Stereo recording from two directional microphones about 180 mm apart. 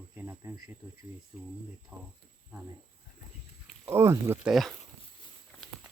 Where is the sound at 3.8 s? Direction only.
15° right (ahead or behind).